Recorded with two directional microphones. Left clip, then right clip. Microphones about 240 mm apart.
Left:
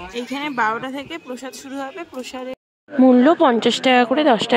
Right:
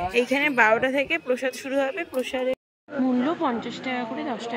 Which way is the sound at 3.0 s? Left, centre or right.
Left.